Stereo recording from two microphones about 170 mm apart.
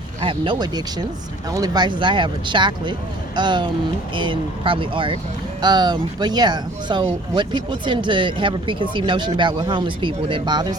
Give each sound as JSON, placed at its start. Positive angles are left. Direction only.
{"t": 0.2, "sound": "speech", "side_deg": -30}